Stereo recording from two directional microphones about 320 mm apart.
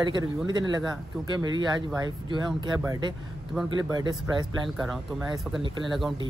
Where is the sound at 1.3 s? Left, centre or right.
Centre.